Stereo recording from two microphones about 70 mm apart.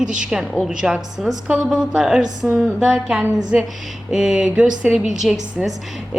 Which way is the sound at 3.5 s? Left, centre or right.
Right.